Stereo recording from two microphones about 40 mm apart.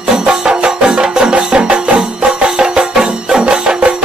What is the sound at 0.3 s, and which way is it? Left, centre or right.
Music, right.